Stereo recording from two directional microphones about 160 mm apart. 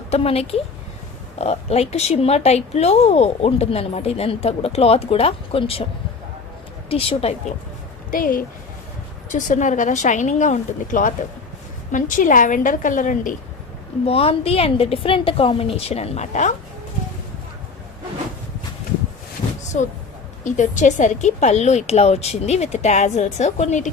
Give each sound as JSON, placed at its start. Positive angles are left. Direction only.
{"t": 0.1, "sound": "speech", "side_deg": 40}
{"t": 6.9, "sound": "speech", "side_deg": 35}
{"t": 8.1, "sound": "a woman's voice", "side_deg": 60}
{"t": 14.0, "sound": "speech", "side_deg": 35}
{"t": 19.7, "sound": "speech", "side_deg": 50}